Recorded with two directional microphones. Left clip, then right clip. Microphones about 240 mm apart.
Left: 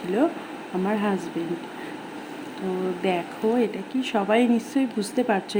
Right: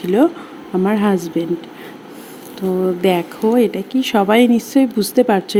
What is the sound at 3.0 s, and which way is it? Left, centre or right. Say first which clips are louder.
A woman's voice: right 9 dB; right.